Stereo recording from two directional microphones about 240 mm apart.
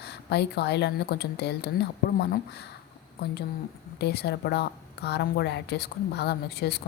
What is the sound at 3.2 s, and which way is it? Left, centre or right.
Speech, left.